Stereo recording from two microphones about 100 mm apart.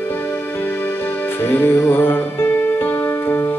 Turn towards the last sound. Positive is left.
turn(degrees=25)  # may be behind; listen again after turning